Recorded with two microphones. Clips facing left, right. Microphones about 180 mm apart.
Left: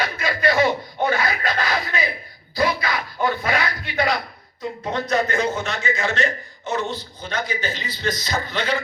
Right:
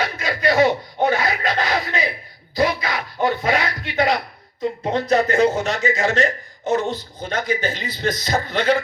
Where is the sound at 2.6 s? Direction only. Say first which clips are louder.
Right 2 dB; 20° right (ahead or behind).